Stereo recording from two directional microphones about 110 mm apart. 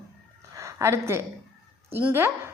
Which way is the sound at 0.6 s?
25° right (ahead or behind).